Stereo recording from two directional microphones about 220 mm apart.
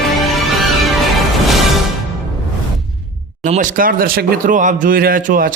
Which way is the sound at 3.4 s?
35° right (ahead or behind).